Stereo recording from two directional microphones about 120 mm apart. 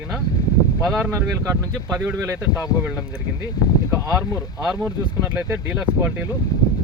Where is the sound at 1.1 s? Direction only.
25° right (ahead or behind).